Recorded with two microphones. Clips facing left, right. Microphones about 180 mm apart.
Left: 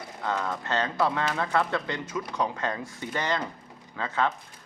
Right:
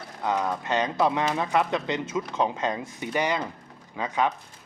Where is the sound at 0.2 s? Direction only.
15° right (ahead or behind).